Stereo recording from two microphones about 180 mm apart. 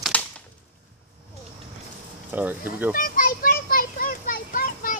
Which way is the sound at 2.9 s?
55° left (ahead or behind).